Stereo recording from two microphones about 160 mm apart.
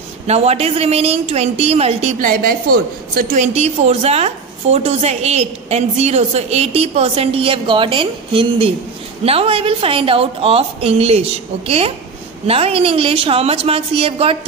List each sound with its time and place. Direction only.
0.3 s a woman's voice: 40° right (ahead or behind)
2.1 s a woman's voice: 65° right (ahead or behind)
3.5 s a woman's voice: 40° right (ahead or behind)